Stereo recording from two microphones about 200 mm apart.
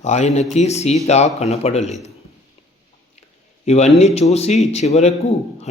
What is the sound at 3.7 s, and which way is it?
A man's voice, 35° left (ahead or behind).